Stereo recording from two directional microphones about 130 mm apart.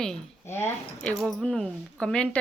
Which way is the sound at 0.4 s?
20° left (ahead or behind).